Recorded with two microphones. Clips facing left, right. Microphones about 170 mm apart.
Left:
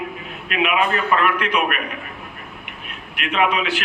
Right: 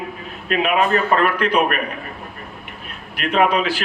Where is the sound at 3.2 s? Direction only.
35° right (ahead or behind).